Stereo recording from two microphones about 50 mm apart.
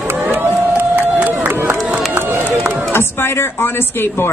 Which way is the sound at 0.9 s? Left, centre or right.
Right.